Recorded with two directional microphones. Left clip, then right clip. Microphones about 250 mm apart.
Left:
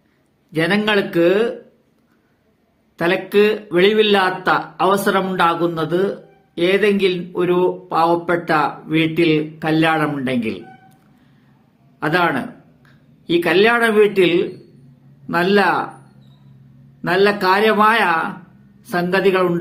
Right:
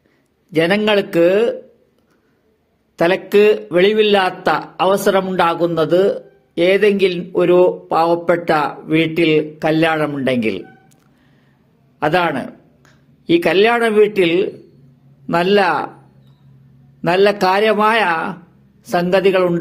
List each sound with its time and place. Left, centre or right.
0.5 s speech: right
3.0 s speech: right
11.9 s speech: right
17.0 s speech: right